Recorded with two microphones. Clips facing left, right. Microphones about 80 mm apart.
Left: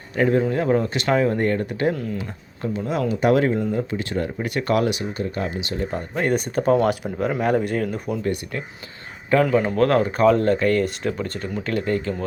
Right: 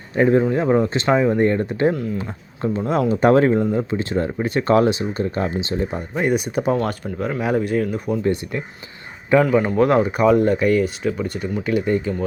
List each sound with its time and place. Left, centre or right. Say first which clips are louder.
0.2 s speech: right 3 dB; right
2.6 s speech: right 4 dB; right
5.9 s speech: even; centre
6.7 s speech: left 3 dB; centre
8.2 s speech: right 4 dB; right
9.4 s speech: even; centre